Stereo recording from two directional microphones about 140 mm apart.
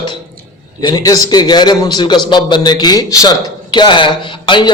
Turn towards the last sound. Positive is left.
turn(degrees=35)  # may be behind; listen again after turning